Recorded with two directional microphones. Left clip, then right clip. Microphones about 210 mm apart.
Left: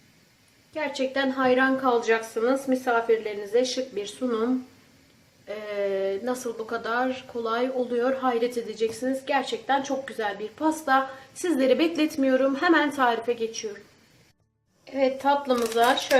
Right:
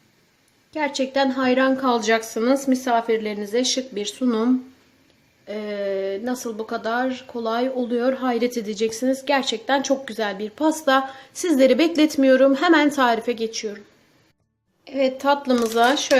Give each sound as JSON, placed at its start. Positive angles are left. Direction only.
{"t": 0.7, "sound": "a woman's voice", "side_deg": -40}
{"t": 5.5, "sound": "speech", "side_deg": -30}
{"t": 14.8, "sound": "a woman's voice", "side_deg": -45}